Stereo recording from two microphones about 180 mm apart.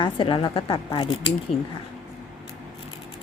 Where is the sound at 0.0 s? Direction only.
30° left (ahead or behind).